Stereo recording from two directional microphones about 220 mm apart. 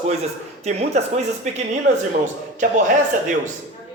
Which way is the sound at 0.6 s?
30° right (ahead or behind).